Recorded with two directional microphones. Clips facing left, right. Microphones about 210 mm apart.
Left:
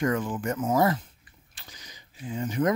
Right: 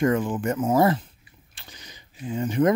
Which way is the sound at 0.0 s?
25° right (ahead or behind).